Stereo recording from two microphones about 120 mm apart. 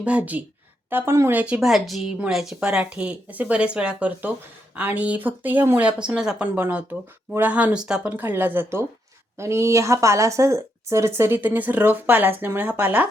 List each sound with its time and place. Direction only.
0.0 s a woman's voice: 10° right (ahead or behind)
1.6 s a woman's voice: centre (ahead or behind)